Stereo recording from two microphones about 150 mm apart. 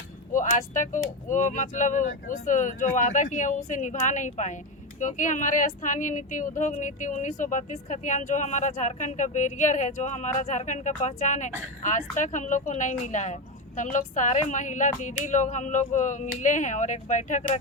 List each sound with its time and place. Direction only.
0.3 s speech: 60° left (ahead or behind)